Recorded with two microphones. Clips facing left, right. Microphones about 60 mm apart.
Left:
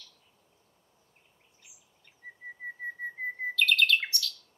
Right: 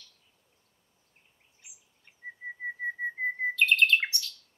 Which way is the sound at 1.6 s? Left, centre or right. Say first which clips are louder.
Right 3 dB; centre.